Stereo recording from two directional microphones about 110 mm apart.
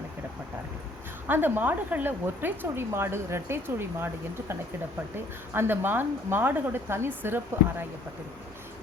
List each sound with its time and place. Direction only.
1.3 s speech: 20° right (ahead or behind)
5.5 s speech: 20° right (ahead or behind)